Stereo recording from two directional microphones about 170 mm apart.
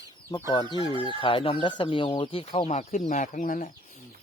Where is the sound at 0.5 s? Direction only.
25° left (ahead or behind).